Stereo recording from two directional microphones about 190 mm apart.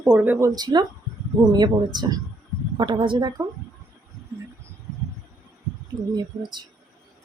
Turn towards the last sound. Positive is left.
turn(degrees=-20)  # may be behind; listen again after turning